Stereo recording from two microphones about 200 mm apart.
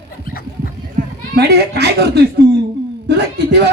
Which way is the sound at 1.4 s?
55° right (ahead or behind).